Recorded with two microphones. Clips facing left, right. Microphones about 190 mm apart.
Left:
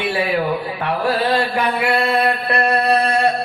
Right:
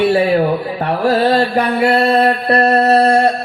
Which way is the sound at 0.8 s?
40° right (ahead or behind).